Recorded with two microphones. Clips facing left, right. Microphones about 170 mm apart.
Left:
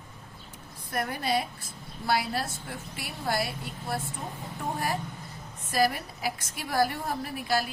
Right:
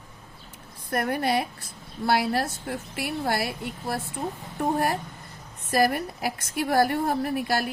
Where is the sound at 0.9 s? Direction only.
60° right (ahead or behind).